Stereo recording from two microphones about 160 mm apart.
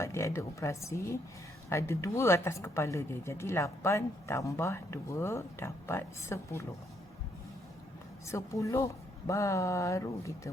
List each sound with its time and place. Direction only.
0.0 s speech: 15° left (ahead or behind)
8.3 s speech: 20° left (ahead or behind)